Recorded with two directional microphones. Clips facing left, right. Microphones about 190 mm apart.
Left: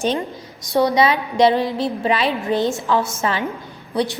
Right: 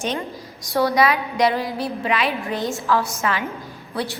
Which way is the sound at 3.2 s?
30° left (ahead or behind).